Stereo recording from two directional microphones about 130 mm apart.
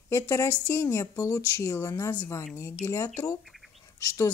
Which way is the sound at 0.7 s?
25° left (ahead or behind).